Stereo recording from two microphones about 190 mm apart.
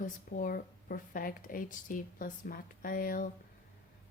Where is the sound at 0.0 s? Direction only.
45° left (ahead or behind).